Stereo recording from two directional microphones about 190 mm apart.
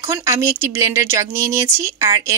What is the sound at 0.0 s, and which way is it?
Speech, 15° right (ahead or behind).